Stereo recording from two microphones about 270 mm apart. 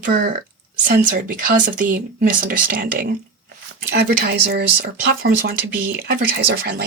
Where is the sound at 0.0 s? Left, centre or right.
Right.